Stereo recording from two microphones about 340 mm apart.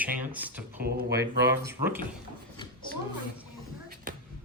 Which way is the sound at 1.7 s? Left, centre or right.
Centre.